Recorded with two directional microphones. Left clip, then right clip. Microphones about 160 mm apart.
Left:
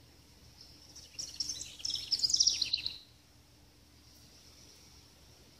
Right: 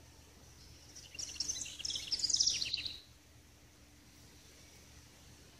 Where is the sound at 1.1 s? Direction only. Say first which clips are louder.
Left 1 dB; 45° left (ahead or behind).